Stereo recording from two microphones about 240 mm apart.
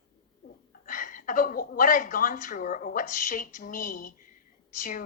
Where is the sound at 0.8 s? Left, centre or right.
Left.